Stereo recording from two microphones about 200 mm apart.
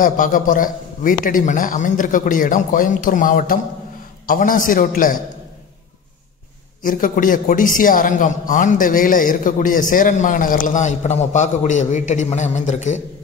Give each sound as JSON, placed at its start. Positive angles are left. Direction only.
{"t": 0.0, "sound": "a man's voice", "side_deg": 40}
{"t": 6.8, "sound": "a man's voice", "side_deg": 40}